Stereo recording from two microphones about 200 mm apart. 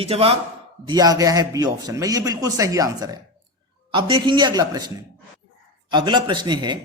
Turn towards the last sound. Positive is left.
turn(degrees=-20)  # may be behind; listen again after turning